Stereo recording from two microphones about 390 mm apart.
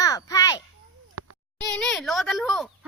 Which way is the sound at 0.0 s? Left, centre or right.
Centre.